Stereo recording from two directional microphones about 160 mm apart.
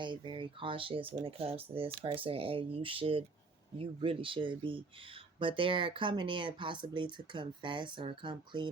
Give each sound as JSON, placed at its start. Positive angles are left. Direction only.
{"t": 0.0, "sound": "speech", "side_deg": -30}